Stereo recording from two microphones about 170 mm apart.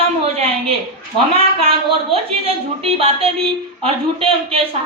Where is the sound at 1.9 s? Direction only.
35° right (ahead or behind).